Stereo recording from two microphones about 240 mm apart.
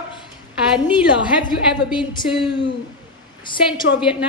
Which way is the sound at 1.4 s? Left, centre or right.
Centre.